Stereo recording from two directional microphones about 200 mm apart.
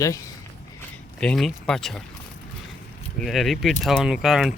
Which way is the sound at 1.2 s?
5° left (ahead or behind).